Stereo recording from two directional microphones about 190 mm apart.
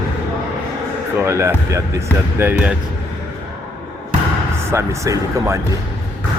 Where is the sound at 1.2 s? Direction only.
15° right (ahead or behind).